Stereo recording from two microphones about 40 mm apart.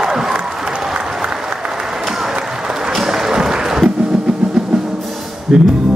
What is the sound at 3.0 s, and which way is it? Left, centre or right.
Applause, centre.